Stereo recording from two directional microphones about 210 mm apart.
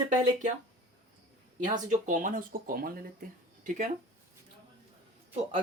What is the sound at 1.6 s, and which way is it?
Speech, 35° right (ahead or behind).